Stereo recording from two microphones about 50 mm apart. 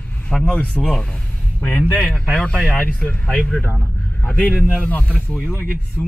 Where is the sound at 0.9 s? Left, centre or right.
Centre.